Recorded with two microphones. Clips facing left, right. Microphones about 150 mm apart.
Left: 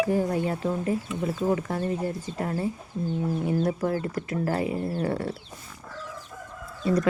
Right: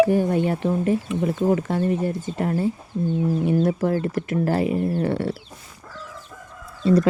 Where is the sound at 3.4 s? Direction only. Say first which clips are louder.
Right 4 dB; 25° right (ahead or behind).